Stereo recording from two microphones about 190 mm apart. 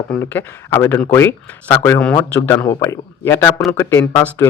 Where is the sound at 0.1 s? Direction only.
10° left (ahead or behind).